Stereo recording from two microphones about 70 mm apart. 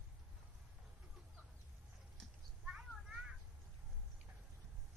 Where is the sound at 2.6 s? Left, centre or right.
Centre.